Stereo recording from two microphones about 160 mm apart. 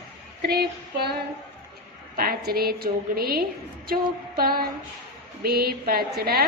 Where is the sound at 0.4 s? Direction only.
80° right.